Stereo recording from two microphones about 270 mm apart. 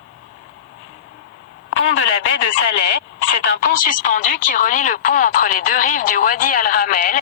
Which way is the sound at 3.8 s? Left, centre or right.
Left.